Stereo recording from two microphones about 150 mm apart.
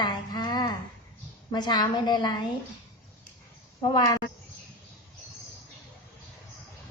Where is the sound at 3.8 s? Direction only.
25° left (ahead or behind).